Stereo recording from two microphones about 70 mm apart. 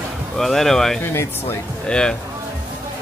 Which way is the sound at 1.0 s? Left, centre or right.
Left.